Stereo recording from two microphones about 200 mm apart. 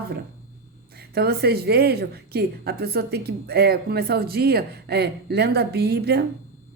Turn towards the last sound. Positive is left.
turn(degrees=-55)  # may be behind; listen again after turning